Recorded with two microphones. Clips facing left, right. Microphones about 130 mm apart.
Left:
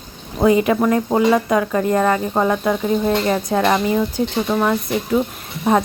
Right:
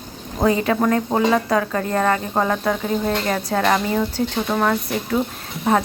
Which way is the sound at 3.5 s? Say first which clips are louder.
Left 1 dB; 10° left (ahead or behind).